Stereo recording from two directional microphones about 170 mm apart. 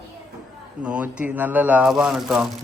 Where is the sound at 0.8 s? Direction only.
5° right (ahead or behind).